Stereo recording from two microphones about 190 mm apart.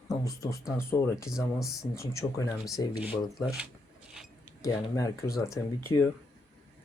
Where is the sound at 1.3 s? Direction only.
Centre (ahead or behind).